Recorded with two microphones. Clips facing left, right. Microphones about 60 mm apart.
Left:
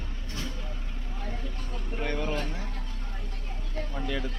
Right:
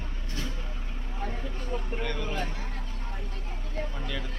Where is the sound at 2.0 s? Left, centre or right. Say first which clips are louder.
Left 2 dB; left.